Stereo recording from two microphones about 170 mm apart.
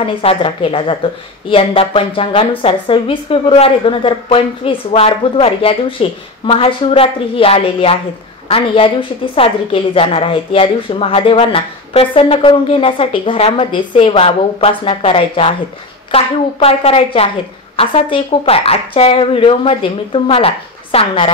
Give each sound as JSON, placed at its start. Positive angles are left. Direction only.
{"t": 0.0, "sound": "a woman's voice", "side_deg": 35}